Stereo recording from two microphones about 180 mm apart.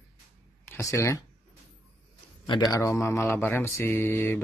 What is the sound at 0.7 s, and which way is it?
Speech, 15° left (ahead or behind).